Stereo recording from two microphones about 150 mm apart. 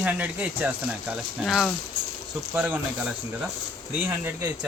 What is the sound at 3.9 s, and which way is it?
Speech, 10° right (ahead or behind).